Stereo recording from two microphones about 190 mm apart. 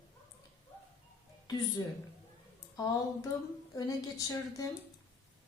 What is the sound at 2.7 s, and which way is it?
A woman's voice, 20° left (ahead or behind).